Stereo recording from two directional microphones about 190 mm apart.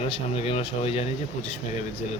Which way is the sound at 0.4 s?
30° left (ahead or behind).